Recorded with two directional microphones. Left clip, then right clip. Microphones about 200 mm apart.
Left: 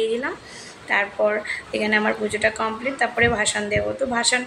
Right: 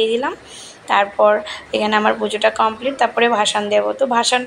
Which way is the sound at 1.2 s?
10° right (ahead or behind).